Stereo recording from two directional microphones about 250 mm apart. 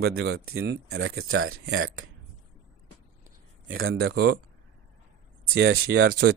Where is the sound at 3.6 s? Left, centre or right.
Right.